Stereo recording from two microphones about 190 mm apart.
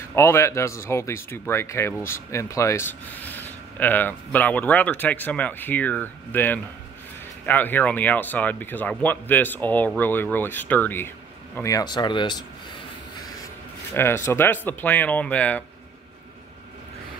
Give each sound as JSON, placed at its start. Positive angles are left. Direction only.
{"t": 0.1, "sound": "speech", "side_deg": 15}
{"t": 13.9, "sound": "speech", "side_deg": 15}